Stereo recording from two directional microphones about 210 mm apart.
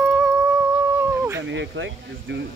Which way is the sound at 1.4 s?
60° right (ahead or behind).